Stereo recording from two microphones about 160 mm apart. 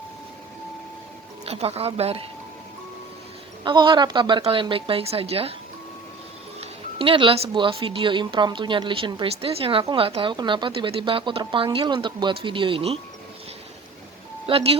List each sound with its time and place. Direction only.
1.5 s a woman's voice: 40° right (ahead or behind)
3.6 s a woman's voice: 30° right (ahead or behind)
6.6 s a woman's voice: 35° right (ahead or behind)
14.4 s a woman's voice: 35° right (ahead or behind)